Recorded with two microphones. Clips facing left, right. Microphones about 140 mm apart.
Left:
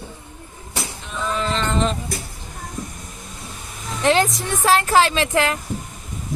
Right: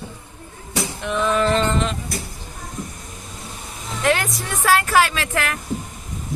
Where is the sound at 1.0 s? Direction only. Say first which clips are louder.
Right 6 dB; 70° right (ahead or behind).